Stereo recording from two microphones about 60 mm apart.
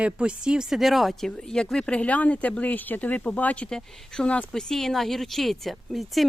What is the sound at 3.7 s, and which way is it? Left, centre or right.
Speech, centre.